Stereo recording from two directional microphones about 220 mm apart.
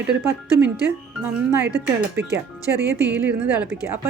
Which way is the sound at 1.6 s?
45° right (ahead or behind).